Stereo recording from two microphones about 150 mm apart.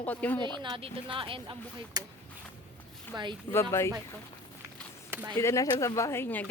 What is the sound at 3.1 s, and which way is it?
Speech, 30° right (ahead or behind).